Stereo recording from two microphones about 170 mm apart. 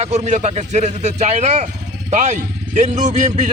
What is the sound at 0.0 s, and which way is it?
A man's voice, 40° right (ahead or behind).